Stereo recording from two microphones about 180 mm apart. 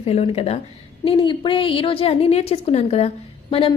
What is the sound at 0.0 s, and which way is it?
A woman's voice, 35° left (ahead or behind).